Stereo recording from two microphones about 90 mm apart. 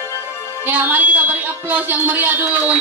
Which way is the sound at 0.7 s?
20° right (ahead or behind).